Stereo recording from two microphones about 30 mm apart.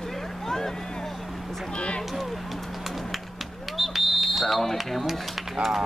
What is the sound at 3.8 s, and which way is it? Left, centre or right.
Smoke detector, centre.